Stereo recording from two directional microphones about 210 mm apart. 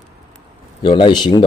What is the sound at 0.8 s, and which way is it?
Speech, 20° left (ahead or behind).